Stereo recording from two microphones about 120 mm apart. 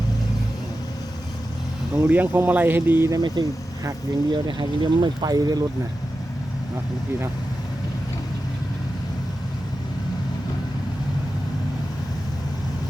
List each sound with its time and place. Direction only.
2.0 s speech: 15° right (ahead or behind)
3.1 s speech: 30° right (ahead or behind)